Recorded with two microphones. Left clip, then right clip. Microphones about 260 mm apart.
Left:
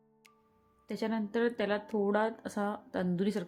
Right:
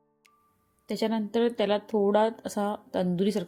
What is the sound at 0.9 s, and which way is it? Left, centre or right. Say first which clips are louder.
A woman's voice: right 6 dB; centre.